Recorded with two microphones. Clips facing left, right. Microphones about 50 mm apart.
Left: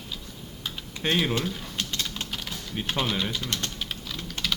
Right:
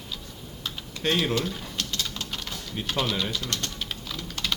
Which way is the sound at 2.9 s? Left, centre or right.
Centre.